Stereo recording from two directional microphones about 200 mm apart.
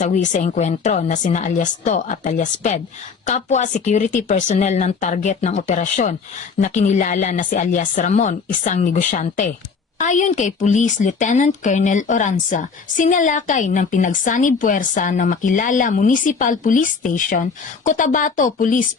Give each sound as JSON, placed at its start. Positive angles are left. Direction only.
{"t": 0.0, "sound": "a woman's voice", "side_deg": 40}